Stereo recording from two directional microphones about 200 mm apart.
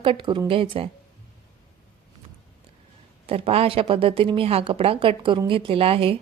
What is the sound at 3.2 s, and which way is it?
Speech, 30° right (ahead or behind).